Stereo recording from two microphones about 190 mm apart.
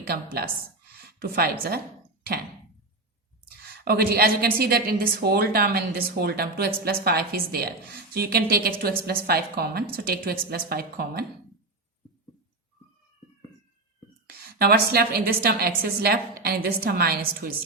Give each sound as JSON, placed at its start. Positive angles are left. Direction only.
{"t": 0.1, "sound": "a woman's voice", "side_deg": -50}
{"t": 3.8, "sound": "a woman's voice", "side_deg": -55}
{"t": 14.3, "sound": "a woman's voice", "side_deg": -55}